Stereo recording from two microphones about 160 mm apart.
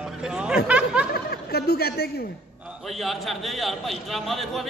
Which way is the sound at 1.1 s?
80° left.